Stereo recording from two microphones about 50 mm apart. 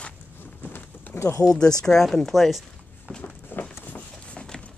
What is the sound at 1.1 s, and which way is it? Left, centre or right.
Speech, left.